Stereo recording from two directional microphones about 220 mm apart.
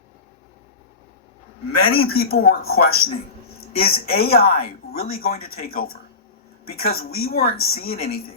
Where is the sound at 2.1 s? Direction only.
45° left (ahead or behind).